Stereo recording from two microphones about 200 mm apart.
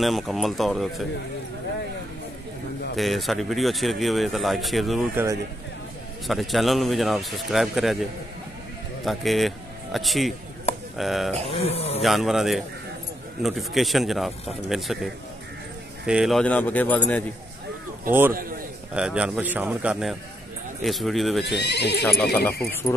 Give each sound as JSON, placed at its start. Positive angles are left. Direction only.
{"t": 0.0, "sound": "speech", "side_deg": 0}
{"t": 3.0, "sound": "speech", "side_deg": 0}
{"t": 5.1, "sound": "speech", "side_deg": -15}
{"t": 6.2, "sound": "speech", "side_deg": 0}
{"t": 9.0, "sound": "speech", "side_deg": 0}
{"t": 11.5, "sound": "speech", "side_deg": 30}
{"t": 12.0, "sound": "speech", "side_deg": 0}
{"t": 16.1, "sound": "speech", "side_deg": 0}
{"t": 18.9, "sound": "speech", "side_deg": -5}
{"t": 21.5, "sound": "speech", "side_deg": 55}
{"t": 22.2, "sound": "speech", "side_deg": 5}